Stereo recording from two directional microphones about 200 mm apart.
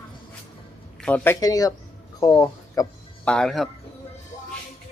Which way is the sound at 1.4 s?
20° left (ahead or behind).